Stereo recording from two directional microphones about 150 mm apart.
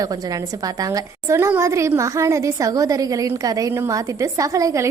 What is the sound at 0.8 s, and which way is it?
A woman's voice, 25° right (ahead or behind).